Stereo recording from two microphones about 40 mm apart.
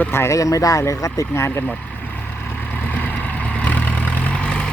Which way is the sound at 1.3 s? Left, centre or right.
Left.